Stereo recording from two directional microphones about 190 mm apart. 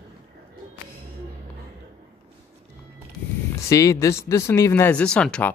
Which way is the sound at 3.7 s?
15° left (ahead or behind).